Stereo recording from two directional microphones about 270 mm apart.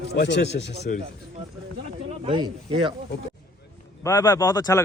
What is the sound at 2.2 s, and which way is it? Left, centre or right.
Speech, centre.